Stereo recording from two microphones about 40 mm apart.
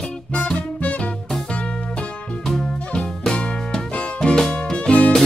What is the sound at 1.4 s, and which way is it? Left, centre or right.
Music, left.